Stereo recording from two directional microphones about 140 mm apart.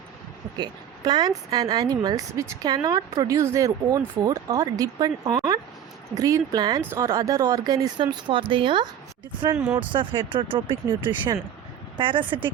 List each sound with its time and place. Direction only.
0.5 s a woman's voice: 30° right (ahead or behind)
9.5 s speech: 20° right (ahead or behind)
9.9 s speech: 35° right (ahead or behind)